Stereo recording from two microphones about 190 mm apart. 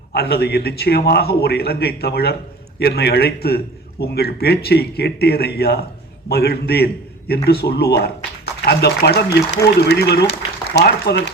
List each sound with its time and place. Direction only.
0.1 s a man's voice: 55° left (ahead or behind)